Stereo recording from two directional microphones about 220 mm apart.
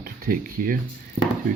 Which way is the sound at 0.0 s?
40° right (ahead or behind).